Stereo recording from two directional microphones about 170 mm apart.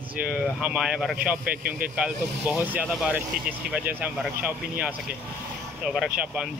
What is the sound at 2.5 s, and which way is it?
Speech, 10° right (ahead or behind).